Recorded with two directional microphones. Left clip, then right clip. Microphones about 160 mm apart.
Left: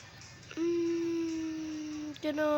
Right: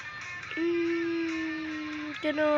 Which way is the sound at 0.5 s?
10° left (ahead or behind).